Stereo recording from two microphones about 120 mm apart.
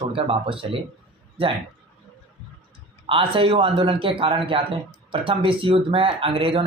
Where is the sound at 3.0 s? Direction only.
45° right (ahead or behind).